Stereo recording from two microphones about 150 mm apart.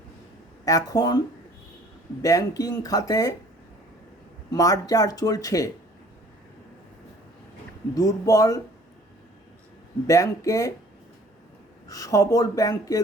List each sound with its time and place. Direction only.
0.6 s speech: 25° left (ahead or behind)
2.2 s speech: 25° left (ahead or behind)
4.5 s speech: 25° left (ahead or behind)
7.9 s speech: 25° left (ahead or behind)
10.1 s speech: 20° left (ahead or behind)
11.9 s speech: 25° left (ahead or behind)